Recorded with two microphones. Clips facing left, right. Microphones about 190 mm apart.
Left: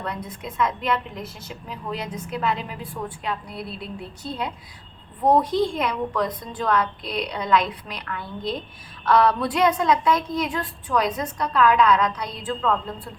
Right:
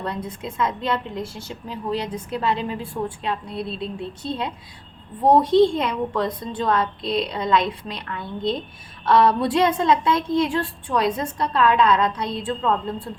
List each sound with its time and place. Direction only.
0.0 s a woman's voice: 30° right (ahead or behind)